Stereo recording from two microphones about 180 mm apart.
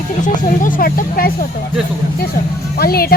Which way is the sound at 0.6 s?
50° left (ahead or behind).